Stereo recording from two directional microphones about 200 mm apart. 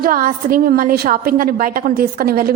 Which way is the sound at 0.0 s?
45° right (ahead or behind).